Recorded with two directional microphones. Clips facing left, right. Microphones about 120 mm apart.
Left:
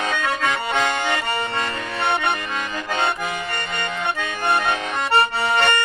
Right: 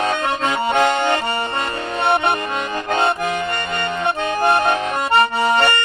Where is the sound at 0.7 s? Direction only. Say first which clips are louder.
Right 8 dB; 50° right (ahead or behind).